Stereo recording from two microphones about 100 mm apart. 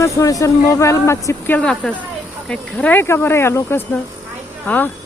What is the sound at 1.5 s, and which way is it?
Speech, 10° left (ahead or behind).